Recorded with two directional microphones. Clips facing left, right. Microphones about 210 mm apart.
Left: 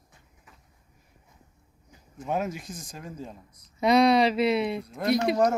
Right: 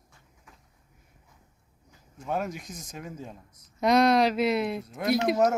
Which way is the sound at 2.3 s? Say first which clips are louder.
Left 2 dB; 5° left (ahead or behind).